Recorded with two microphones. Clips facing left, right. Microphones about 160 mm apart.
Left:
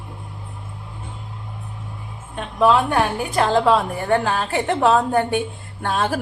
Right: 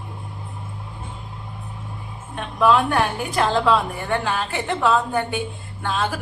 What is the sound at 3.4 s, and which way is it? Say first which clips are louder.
A woman's voice: left 2 dB; 35° left (ahead or behind).